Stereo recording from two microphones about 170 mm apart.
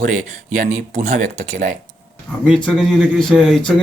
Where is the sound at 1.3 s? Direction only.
45° right (ahead or behind).